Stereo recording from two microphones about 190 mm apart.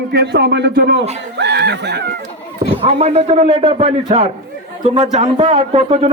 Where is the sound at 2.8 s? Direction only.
35° right (ahead or behind).